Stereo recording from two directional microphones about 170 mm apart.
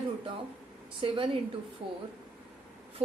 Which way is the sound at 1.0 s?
30° right (ahead or behind).